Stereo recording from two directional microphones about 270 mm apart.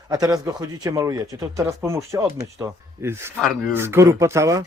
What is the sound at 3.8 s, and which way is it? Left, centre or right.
Speech, centre.